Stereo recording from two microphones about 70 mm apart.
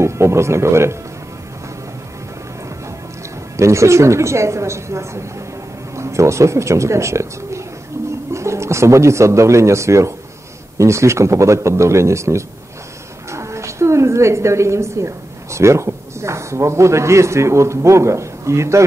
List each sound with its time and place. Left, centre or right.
0.0 s speech: right
3.5 s a woman's voice: right